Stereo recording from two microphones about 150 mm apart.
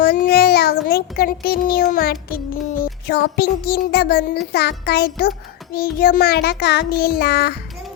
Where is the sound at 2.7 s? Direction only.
80° left.